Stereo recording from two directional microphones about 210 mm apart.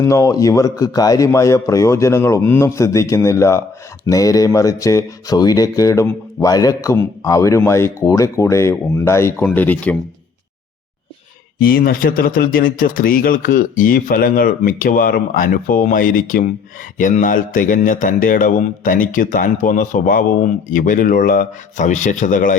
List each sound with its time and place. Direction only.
0.0 s speech: 15° left (ahead or behind)
11.6 s a man's voice: 45° left (ahead or behind)